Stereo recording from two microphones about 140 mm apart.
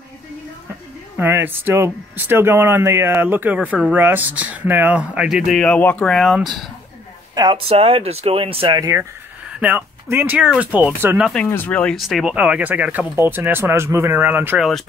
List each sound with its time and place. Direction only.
1.1 s speech: 15° right (ahead or behind); by 6.4 s 5° left (ahead or behind)
7.3 s speech: 30° right (ahead or behind)
7.6 s speech: 45° right (ahead or behind)
8.7 s speech: 25° right (ahead or behind)
9.6 s speech: 15° right (ahead or behind)
11.5 s speech: 10° left (ahead or behind); by 14.6 s 15° right (ahead or behind)
14.6 s speech: centre (ahead or behind)